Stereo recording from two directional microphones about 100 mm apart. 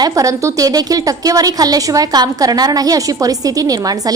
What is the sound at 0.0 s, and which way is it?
A woman's voice, 35° right (ahead or behind).